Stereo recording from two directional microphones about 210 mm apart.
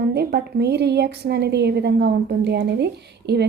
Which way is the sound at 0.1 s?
50° right (ahead or behind).